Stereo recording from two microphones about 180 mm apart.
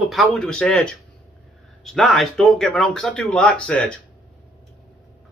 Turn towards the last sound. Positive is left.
turn(degrees=5)  # may be behind; listen again after turning